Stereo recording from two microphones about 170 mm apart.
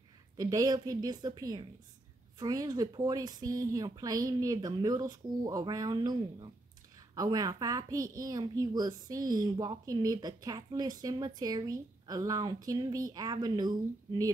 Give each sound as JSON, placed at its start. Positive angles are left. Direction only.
{"t": 0.4, "sound": "a child's voice", "side_deg": -20}